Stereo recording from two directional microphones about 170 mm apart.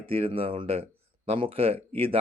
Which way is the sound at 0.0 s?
35° right (ahead or behind).